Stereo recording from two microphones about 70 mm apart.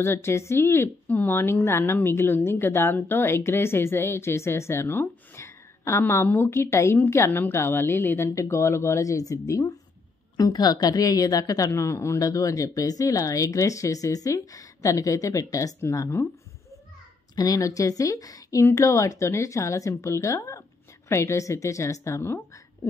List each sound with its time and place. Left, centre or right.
0.0 s a woman's voice: left
1.0 s a woman's voice: left
5.4 s a sound: left
6.2 s a woman's voice: left
10.3 s a woman's voice: left
17.4 s a woman's voice: left
18.6 s speech: left